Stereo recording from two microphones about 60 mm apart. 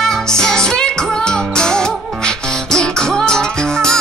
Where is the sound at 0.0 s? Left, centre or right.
Centre.